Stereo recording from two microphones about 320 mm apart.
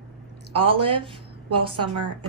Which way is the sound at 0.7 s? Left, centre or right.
Right.